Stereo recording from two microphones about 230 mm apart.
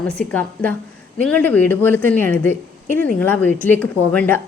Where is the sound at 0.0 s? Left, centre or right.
Centre.